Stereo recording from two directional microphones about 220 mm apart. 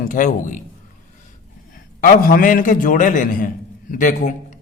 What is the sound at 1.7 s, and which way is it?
A man's voice, 40° left (ahead or behind).